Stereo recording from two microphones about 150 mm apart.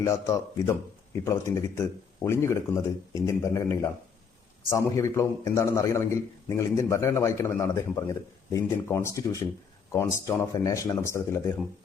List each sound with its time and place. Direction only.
0.0 s a man's voice: 20° left (ahead or behind)